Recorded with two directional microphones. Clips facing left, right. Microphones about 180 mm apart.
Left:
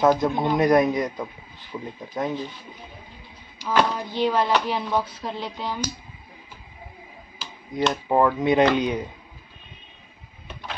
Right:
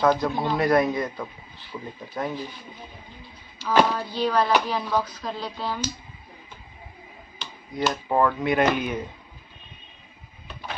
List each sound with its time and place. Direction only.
0.0 s a man's voice: 20° left (ahead or behind)
3.6 s a man's voice: 15° left (ahead or behind)
7.9 s a man's voice: 15° left (ahead or behind)